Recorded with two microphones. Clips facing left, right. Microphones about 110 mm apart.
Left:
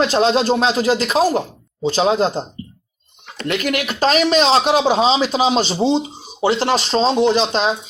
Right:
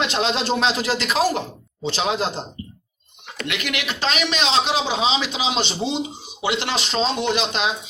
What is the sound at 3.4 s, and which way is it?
Speech, 40° left (ahead or behind).